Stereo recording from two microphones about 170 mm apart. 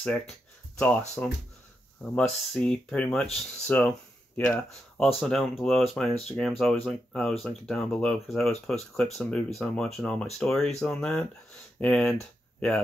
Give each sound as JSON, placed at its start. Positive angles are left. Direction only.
{"t": 1.2, "sound": "speech", "side_deg": 10}